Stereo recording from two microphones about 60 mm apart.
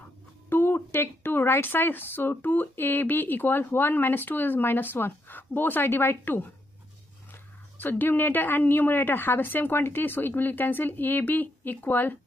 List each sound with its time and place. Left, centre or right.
0.5 s speech: left
7.8 s speech: left